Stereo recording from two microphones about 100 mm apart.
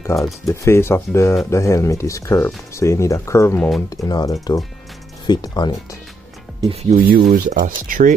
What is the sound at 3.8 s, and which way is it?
Speech, 40° left (ahead or behind).